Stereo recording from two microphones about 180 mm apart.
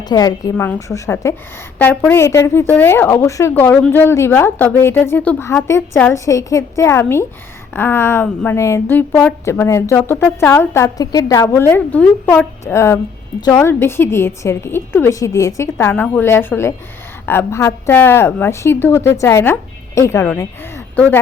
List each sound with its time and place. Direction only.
0.0 s speech: 20° left (ahead or behind)